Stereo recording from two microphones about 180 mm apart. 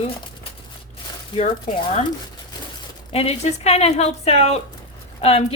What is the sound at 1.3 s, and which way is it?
Speech, 25° left (ahead or behind).